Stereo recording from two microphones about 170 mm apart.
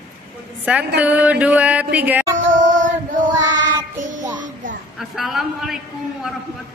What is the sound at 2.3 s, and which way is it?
Child singing, 50° right (ahead or behind).